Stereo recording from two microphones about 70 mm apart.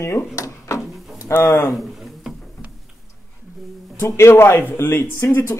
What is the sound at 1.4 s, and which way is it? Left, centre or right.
Speech, left.